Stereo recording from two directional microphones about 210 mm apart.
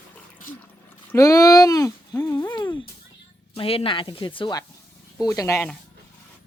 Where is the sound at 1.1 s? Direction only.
15° left (ahead or behind).